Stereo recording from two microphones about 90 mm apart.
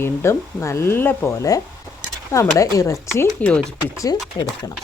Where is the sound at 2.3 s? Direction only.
35° left (ahead or behind).